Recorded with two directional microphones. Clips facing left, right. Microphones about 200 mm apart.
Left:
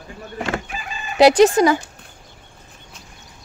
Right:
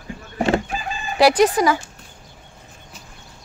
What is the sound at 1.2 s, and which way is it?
Speech, 25° left (ahead or behind).